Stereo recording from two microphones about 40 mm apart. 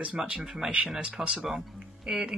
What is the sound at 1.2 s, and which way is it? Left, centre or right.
Speech, right.